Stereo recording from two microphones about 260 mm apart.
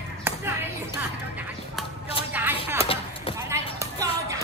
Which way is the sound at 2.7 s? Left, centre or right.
Left.